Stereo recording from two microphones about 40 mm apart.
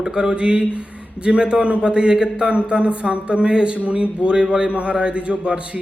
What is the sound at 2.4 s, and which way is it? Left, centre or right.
A man's voice, right.